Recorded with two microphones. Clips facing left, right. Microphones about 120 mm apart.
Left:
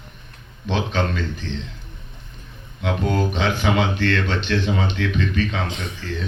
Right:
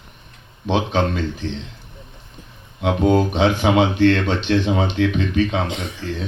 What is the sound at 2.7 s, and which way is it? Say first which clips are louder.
Speech: right 6 dB; 50° right (ahead or behind).